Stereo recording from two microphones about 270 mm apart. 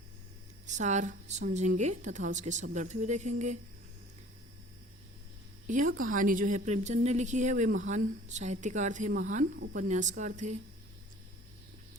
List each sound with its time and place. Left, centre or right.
0.7 s a woman's voice: right
5.6 s a woman's voice: right